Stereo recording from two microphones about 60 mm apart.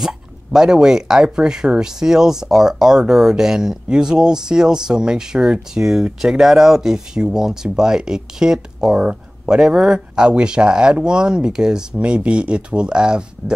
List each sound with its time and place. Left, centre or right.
0.0 s speech: centre